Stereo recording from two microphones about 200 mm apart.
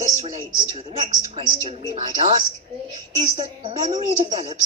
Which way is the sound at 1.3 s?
30° right (ahead or behind).